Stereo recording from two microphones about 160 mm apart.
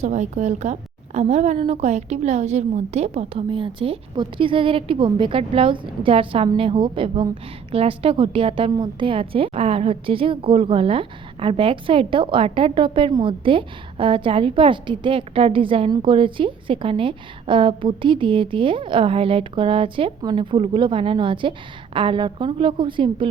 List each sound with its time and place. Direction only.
0.0 s a woman's voice: 50° right (ahead or behind); by 23.3 s 30° right (ahead or behind)